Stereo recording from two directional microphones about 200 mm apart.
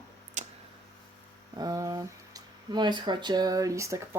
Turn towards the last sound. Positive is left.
turn(degrees=-15)  # may be behind; listen again after turning